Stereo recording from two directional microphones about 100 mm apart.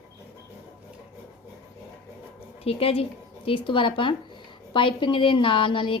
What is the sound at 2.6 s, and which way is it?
Speech, 75° left (ahead or behind).